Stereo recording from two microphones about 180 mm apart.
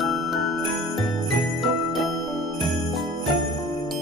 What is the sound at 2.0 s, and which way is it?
Music, centre (ahead or behind).